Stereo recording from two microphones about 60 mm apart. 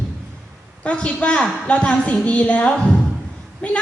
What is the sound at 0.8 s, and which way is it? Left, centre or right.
A woman's voice, left.